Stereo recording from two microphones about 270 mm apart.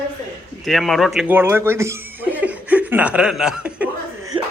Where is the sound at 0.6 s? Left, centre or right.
Centre.